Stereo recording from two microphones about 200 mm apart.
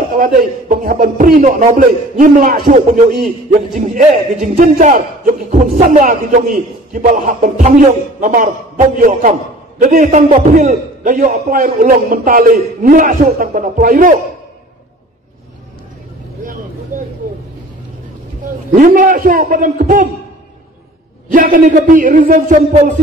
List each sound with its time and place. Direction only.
0.2 s a man's voice: 45° right (ahead or behind)
16.9 s vehicle: 40° right (ahead or behind)
18.8 s a man's voice: 40° right (ahead or behind)
21.3 s a man's voice: 40° right (ahead or behind)